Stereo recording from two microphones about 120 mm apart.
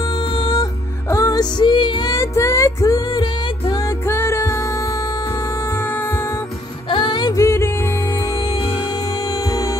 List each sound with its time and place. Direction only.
0.4 s music: 35° left (ahead or behind)
2.1 s music: 25° left (ahead or behind)
6.9 s music: 40° left (ahead or behind)